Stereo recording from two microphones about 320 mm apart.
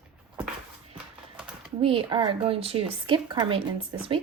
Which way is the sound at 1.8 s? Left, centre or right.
Centre.